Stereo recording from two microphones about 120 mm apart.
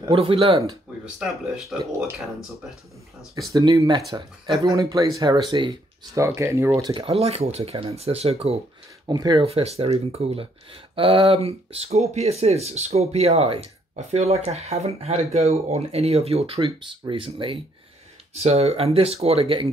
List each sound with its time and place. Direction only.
0.1 s speech: 50° right (ahead or behind)
3.5 s speech: 30° right (ahead or behind)
6.1 s speech: 25° right (ahead or behind)
6.8 s speech: 45° right (ahead or behind)
9.0 s speech: 35° right (ahead or behind)
9.4 s speech: 55° right (ahead or behind)
18.3 s speech: 60° right (ahead or behind)